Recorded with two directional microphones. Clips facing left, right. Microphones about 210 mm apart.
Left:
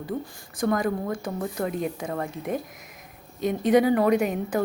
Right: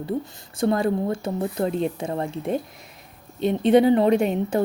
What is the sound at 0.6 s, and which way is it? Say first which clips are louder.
A woman's voice: right 3 dB; 30° right (ahead or behind).